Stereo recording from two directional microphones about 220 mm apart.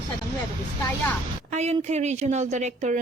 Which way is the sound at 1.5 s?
30° right (ahead or behind).